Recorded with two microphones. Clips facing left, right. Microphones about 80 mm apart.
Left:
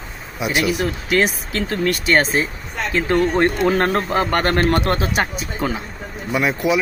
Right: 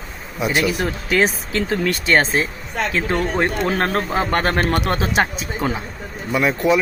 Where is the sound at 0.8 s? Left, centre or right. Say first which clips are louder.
Even; right.